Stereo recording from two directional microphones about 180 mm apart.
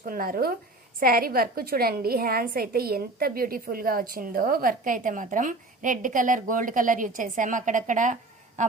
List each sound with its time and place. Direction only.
0.0 s a woman's voice: 55° right (ahead or behind)